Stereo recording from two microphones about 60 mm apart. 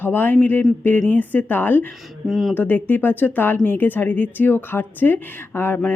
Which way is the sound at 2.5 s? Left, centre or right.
Left.